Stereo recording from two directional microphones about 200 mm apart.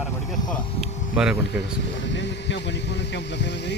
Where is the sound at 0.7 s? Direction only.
35° left (ahead or behind).